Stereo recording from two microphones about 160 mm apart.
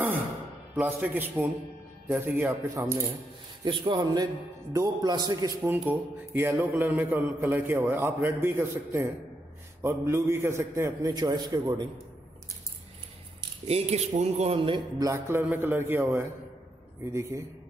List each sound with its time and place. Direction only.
0.7 s a man's voice: 10° right (ahead or behind)
3.6 s a man's voice: 30° right (ahead or behind)
5.7 s a man's voice: 15° right (ahead or behind)
13.7 s speech: 40° right (ahead or behind)
15.0 s a man's voice: 15° right (ahead or behind)